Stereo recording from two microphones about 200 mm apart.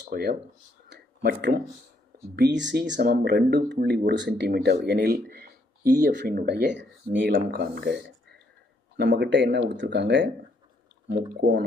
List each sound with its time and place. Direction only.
0.1 s speech: 50° right (ahead or behind)
0.9 s a sound: 55° right (ahead or behind)
2.3 s speech: 60° right (ahead or behind)
7.5 s speech: 50° right (ahead or behind)
11.3 s speech: 65° right (ahead or behind)